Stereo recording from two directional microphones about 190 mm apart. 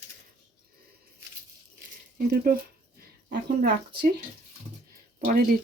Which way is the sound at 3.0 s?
55° right (ahead or behind).